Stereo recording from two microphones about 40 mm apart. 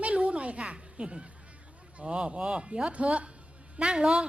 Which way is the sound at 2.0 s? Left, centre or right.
Right.